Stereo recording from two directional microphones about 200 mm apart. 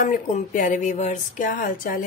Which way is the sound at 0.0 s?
40° left (ahead or behind).